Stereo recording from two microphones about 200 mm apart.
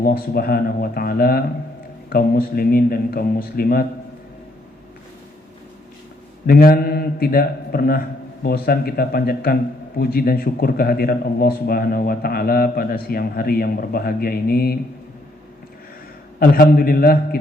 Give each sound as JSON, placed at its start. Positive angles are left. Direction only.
{"t": 0.0, "sound": "a man's voice", "side_deg": 50}
{"t": 6.5, "sound": "a man's voice", "side_deg": 50}
{"t": 16.4, "sound": "a man's voice", "side_deg": 50}